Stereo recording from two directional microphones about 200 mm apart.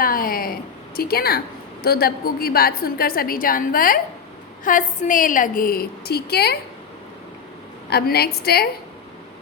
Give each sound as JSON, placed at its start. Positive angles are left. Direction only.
{"t": 0.0, "sound": "a sound", "side_deg": 45}
{"t": 1.8, "sound": "a woman's voice", "side_deg": 50}
{"t": 7.9, "sound": "a woman's voice", "side_deg": 55}